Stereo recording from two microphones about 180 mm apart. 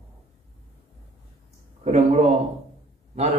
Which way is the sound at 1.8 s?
35° right (ahead or behind).